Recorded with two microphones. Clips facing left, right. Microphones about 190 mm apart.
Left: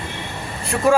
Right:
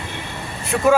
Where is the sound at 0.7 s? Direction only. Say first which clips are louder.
Right 1 dB; centre (ahead or behind).